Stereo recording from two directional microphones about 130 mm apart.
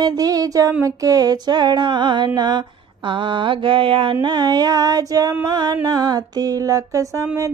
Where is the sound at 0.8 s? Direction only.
25° right (ahead or behind).